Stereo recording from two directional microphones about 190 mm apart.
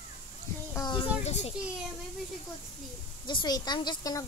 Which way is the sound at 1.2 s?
35° left (ahead or behind).